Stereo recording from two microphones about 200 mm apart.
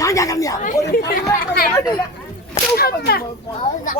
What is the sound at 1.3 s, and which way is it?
Speech, 45° left (ahead or behind).